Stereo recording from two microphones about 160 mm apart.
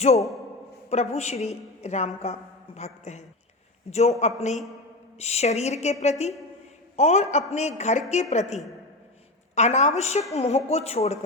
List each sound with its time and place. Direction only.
0.9 s a woman's voice: 40° left (ahead or behind)